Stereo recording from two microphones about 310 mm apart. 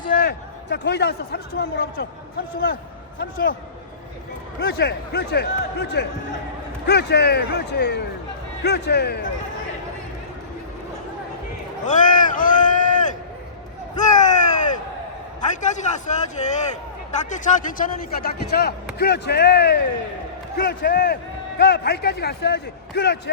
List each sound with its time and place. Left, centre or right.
0.1 s a man's voice: left
3.2 s a man's voice: left
4.6 s a man's voice: left
11.9 s a sound: left
14.0 s a sound: left
15.4 s a man's voice: left